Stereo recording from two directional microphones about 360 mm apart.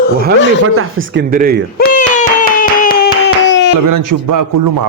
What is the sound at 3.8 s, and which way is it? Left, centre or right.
Speech, right.